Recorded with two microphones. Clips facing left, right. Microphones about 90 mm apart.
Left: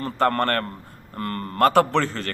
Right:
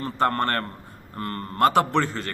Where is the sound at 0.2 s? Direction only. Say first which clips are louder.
Left 2 dB; 20° right (ahead or behind).